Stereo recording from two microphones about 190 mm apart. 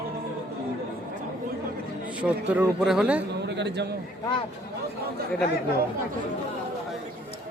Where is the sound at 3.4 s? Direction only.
65° right (ahead or behind).